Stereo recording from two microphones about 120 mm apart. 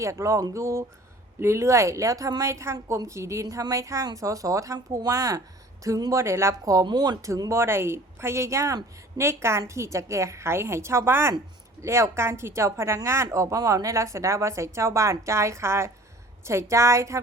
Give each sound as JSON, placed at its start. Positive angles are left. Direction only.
{"t": 0.0, "sound": "speech", "side_deg": -25}